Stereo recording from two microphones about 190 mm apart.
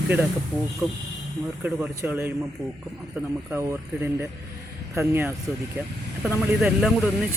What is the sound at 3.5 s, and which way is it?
Speech, 15° right (ahead or behind).